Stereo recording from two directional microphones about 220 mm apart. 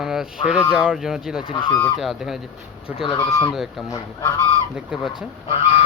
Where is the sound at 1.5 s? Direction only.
25° left (ahead or behind).